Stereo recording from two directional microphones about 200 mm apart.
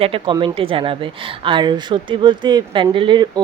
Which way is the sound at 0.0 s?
25° right (ahead or behind).